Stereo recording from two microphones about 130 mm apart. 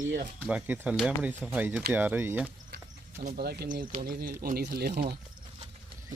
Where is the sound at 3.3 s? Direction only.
90° right.